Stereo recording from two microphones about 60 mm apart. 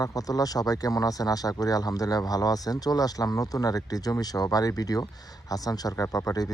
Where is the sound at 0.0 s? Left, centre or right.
Left.